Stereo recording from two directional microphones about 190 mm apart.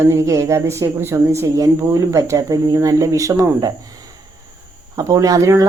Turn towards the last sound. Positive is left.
turn(degrees=-15)  # may be behind; listen again after turning